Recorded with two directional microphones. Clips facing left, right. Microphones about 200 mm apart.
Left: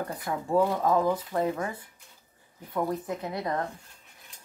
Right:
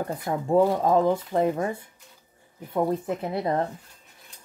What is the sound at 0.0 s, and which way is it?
Speech, 25° right (ahead or behind).